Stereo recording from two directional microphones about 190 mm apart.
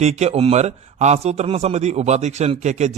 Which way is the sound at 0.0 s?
35° right (ahead or behind).